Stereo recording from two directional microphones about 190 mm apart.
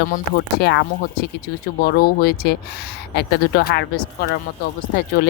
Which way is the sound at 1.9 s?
55° left (ahead or behind).